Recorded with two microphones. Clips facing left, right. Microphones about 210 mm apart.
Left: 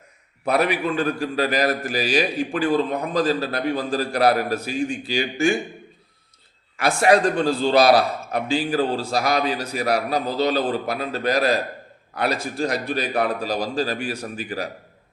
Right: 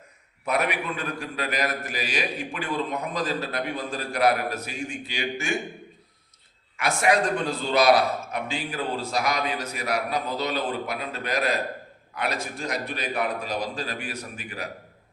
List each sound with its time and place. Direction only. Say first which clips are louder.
0.4 s a man's voice: left 6 dB; 35° left (ahead or behind)
6.7 s a man's voice: left 5 dB; 35° left (ahead or behind)